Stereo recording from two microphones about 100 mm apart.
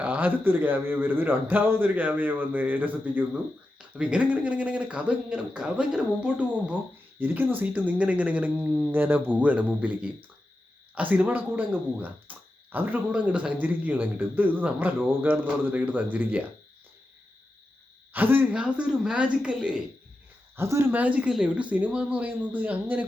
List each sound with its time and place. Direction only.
0.0 s a man's voice: 20° right (ahead or behind)
11.1 s a man's voice: 15° right (ahead or behind)
18.1 s a man's voice: 20° right (ahead or behind)
20.6 s a man's voice: 25° right (ahead or behind)